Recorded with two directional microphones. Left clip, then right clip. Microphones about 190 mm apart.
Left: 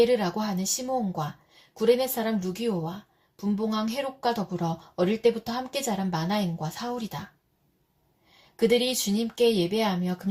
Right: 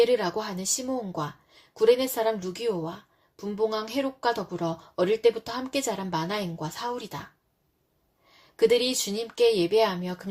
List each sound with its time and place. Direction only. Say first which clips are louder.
0.2 s speech: even; 40° right (ahead or behind)
8.5 s speech: right 1 dB; 40° right (ahead or behind)